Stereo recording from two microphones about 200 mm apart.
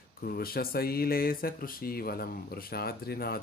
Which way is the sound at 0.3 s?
50° left (ahead or behind).